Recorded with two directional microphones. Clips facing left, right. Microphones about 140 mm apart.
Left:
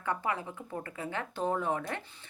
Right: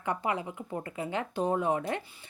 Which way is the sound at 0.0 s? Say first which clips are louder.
Right 2 dB; 15° right (ahead or behind).